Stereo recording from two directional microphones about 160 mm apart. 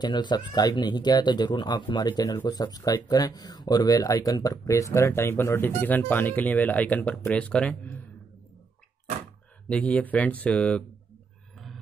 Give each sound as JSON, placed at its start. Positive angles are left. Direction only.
{"t": 0.0, "sound": "speech", "side_deg": 25}
{"t": 9.7, "sound": "speech", "side_deg": 10}